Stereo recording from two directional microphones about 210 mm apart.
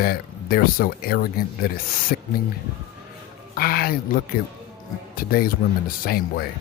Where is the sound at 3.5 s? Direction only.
45° left (ahead or behind).